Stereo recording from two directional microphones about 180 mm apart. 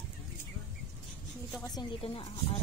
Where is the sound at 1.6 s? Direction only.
20° left (ahead or behind).